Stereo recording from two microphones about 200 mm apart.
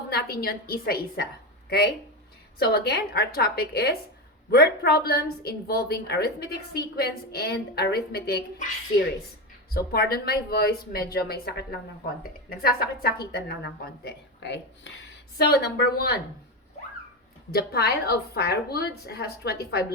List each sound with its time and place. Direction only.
0.1 s a woman's voice: 50° left (ahead or behind)
2.6 s a woman's voice: 55° left (ahead or behind)
17.5 s a woman's voice: 50° left (ahead or behind)